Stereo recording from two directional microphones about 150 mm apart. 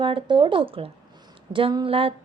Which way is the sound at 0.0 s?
35° right (ahead or behind).